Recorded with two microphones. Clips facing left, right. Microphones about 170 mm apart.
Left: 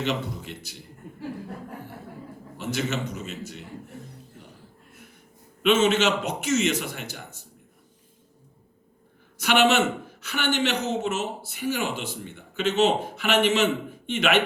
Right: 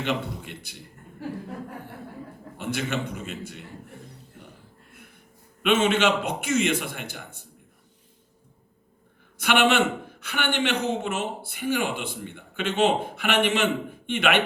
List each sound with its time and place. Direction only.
0.0 s a man's voice: 55° right (ahead or behind)
2.6 s a man's voice: 55° right (ahead or behind)
5.6 s a man's voice: 55° right (ahead or behind)
9.4 s a man's voice: 55° right (ahead or behind)